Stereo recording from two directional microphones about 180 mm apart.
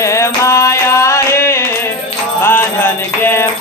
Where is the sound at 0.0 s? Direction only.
15° left (ahead or behind).